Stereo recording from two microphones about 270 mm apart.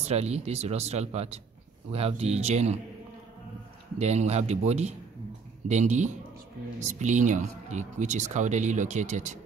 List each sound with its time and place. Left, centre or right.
0.0 s speech: right
4.0 s speech: right